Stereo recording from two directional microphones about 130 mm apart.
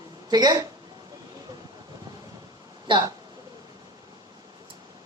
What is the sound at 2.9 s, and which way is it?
Speech, 35° right (ahead or behind).